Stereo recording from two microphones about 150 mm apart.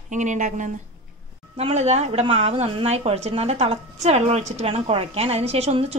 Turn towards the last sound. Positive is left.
turn(degrees=-40)  # may be behind; listen again after turning